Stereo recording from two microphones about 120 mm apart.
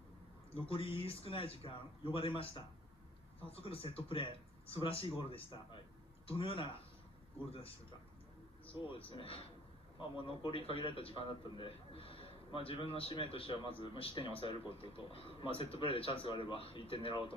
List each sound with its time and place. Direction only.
0.7 s a man's voice: 50° left (ahead or behind)
8.6 s a man's voice: 50° left (ahead or behind)